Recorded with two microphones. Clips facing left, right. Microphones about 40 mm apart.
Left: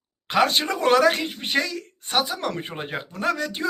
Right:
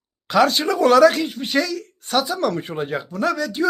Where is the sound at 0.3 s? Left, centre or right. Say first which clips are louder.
Right 4 dB; left.